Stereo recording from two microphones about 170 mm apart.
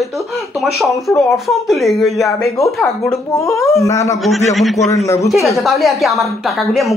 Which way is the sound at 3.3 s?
15° left (ahead or behind).